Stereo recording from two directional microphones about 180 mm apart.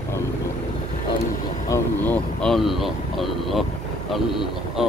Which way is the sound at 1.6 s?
15° left (ahead or behind).